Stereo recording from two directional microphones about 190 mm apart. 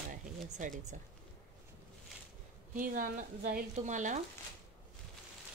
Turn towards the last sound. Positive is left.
turn(degrees=-40)  # may be behind; listen again after turning